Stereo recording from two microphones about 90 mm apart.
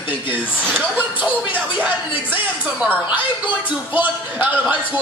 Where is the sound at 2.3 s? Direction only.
15° right (ahead or behind).